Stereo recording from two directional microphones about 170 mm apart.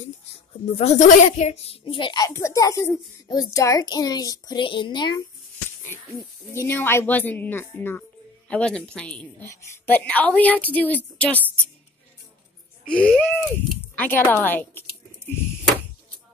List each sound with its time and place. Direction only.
0.7 s a child's voice: 45° left (ahead or behind); by 5.2 s 25° left (ahead or behind)
6.5 s speech: 15° left (ahead or behind)
12.8 s speech: 5° left (ahead or behind)